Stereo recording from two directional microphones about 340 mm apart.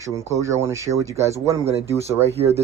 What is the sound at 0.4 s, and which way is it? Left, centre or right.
Speech, centre.